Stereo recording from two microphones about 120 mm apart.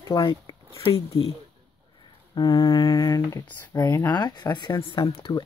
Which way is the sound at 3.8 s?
20° left (ahead or behind).